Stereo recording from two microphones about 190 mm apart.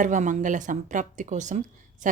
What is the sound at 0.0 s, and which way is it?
Speech, 40° right (ahead or behind).